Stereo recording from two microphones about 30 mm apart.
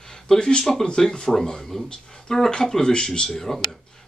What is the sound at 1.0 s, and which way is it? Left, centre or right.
Speech, centre.